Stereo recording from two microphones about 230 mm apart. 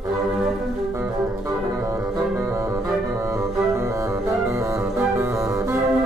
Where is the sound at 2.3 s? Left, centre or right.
Centre.